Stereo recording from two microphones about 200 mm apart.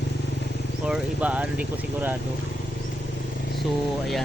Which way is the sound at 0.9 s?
5° right (ahead or behind).